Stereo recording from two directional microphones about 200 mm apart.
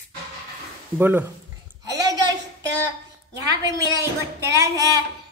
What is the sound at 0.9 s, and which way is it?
Speech, 10° right (ahead or behind).